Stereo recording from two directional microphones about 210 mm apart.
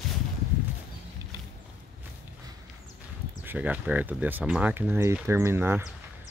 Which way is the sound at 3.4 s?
10° right (ahead or behind).